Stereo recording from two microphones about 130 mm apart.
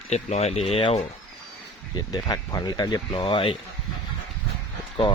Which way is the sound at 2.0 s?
30° left (ahead or behind).